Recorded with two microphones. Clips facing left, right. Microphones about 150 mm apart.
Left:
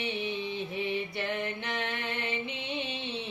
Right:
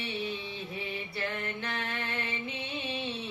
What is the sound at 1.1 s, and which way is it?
Music, 20° left (ahead or behind).